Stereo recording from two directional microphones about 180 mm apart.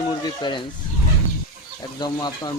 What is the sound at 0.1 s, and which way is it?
Speech, 25° left (ahead or behind).